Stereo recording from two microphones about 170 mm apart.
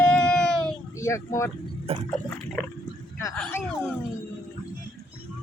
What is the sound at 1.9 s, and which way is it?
Speech, 35° right (ahead or behind).